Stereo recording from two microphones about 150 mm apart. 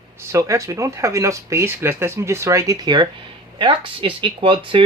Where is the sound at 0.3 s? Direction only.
20° right (ahead or behind).